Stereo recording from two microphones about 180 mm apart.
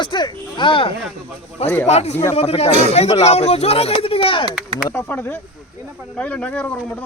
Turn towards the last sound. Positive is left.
turn(degrees=5)  # may be behind; listen again after turning